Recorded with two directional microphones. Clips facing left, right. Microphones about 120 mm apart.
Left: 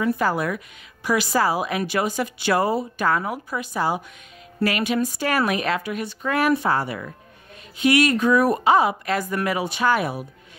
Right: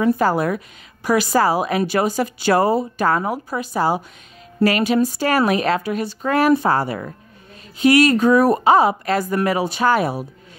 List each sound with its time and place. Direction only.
0.0 s a woman's voice: 35° right (ahead or behind)